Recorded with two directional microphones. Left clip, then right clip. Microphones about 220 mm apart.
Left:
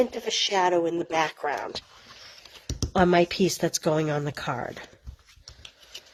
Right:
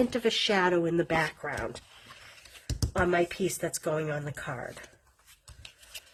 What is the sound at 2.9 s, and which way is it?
Speech, 45° left (ahead or behind).